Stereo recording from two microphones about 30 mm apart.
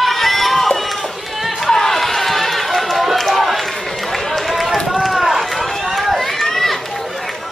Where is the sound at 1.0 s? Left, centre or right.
Centre.